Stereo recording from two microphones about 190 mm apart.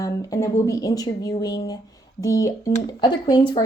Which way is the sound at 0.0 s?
15° left (ahead or behind).